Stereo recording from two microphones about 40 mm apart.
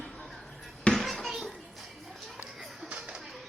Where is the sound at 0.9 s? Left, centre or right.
Centre.